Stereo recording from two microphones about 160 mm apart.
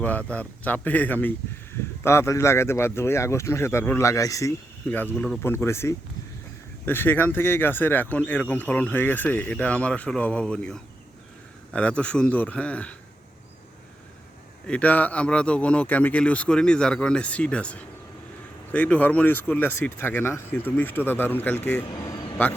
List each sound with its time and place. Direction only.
0.3 s speech: 10° left (ahead or behind)
14.7 s speech: 10° left (ahead or behind)